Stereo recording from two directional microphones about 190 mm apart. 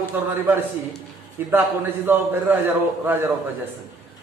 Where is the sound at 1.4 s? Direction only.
10° right (ahead or behind).